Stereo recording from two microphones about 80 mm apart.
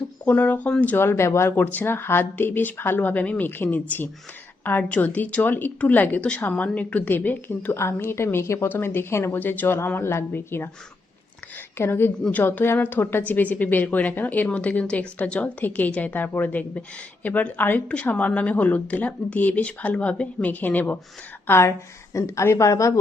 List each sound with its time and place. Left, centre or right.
0.3 s a woman's voice: left
0.9 s a woman's voice: left
11.8 s a woman's voice: left
21.4 s a woman's voice: left